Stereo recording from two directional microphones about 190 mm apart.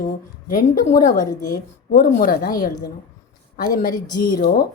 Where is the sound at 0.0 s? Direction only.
50° left (ahead or behind).